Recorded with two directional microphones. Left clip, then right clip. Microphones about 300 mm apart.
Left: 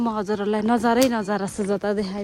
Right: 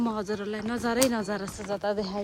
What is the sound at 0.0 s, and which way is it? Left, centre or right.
Speech, centre.